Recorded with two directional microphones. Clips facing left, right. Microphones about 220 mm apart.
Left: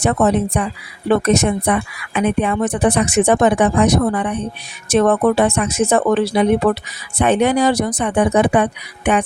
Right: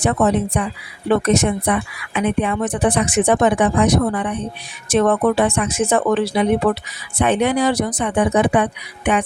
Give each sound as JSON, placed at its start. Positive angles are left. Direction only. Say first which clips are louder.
{"t": 0.5, "sound": "speech", "louder": "left 1 dB", "side_deg": 45}